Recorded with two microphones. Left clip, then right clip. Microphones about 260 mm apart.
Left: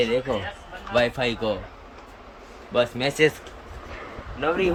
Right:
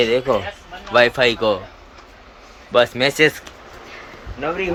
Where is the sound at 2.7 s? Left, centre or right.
Centre.